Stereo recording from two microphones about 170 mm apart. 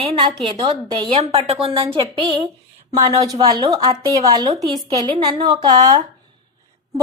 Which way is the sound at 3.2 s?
20° right (ahead or behind).